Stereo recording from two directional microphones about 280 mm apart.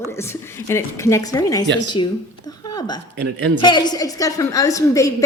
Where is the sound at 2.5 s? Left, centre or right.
Centre.